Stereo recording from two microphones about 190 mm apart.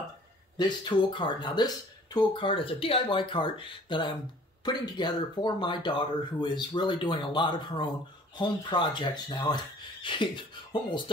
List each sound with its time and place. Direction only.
0.6 s speech: 25° left (ahead or behind)